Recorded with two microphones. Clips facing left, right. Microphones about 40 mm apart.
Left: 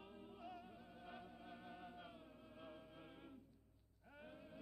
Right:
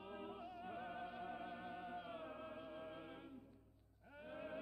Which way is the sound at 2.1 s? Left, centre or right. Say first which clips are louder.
Right 11 dB; right.